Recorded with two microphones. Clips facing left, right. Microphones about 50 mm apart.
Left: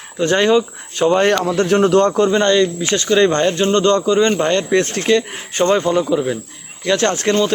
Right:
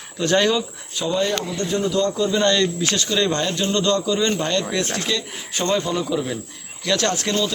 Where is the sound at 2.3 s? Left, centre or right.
Left.